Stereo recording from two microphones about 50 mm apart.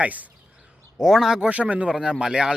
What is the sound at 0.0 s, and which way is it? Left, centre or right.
Speech, right.